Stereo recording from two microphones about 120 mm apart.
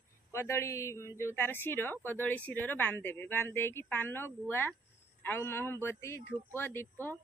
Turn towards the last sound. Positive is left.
turn(degrees=15)  # may be behind; listen again after turning